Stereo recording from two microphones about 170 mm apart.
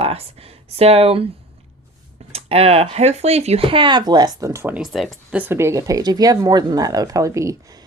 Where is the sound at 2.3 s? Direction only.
35° right (ahead or behind); by 4.8 s 15° right (ahead or behind).